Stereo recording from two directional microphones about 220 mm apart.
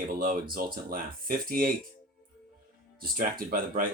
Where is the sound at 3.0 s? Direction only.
40° right (ahead or behind).